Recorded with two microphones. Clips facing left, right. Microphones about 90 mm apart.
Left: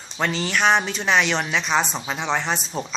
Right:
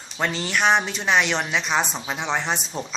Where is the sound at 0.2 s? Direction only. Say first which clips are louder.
Left 1 dB; 5° right (ahead or behind).